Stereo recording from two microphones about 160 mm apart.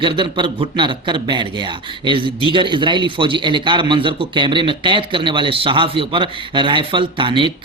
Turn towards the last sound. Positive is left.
turn(degrees=-30)  # may be behind; listen again after turning